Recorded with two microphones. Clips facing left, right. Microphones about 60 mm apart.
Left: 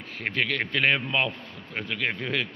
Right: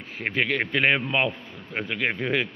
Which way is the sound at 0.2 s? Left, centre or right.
Centre.